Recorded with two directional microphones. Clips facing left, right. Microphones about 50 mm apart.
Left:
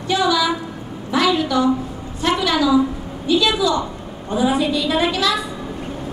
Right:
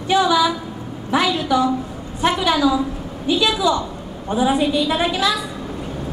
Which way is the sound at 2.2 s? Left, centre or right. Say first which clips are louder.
Right 1 dB; centre.